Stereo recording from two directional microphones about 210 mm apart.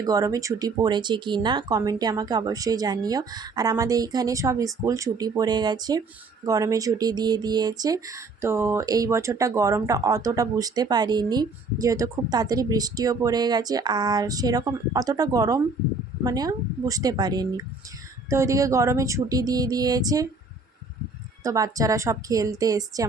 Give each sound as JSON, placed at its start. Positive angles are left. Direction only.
{"t": 0.0, "sound": "speech", "side_deg": -15}
{"t": 21.4, "sound": "speech", "side_deg": -15}